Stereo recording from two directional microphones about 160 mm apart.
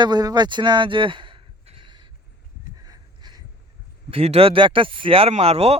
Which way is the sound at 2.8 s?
25° right (ahead or behind).